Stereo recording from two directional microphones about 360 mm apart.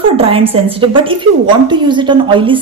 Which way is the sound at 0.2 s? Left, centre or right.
Centre.